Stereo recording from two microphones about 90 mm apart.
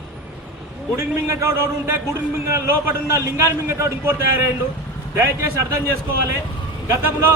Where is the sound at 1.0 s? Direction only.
35° right (ahead or behind).